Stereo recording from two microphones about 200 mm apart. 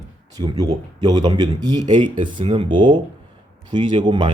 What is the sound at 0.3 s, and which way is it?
Speech, 20° right (ahead or behind).